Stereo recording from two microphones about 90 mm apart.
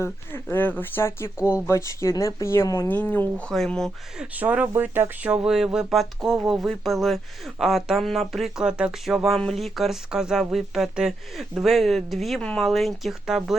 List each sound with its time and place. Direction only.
0.4 s speech: 20° left (ahead or behind)
2.9 s speech: 20° left (ahead or behind)
3.5 s speech: 5° left (ahead or behind)
4.4 s speech: 20° right (ahead or behind)
5.3 s speech: 10° right (ahead or behind)
12.4 s speech: 10° left (ahead or behind)
12.6 s speech: centre (ahead or behind)